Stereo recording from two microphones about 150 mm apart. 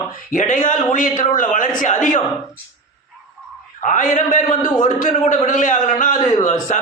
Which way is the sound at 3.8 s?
55° left (ahead or behind).